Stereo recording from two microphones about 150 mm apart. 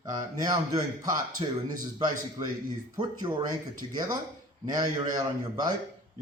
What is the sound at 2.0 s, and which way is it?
A man's voice, 30° right (ahead or behind).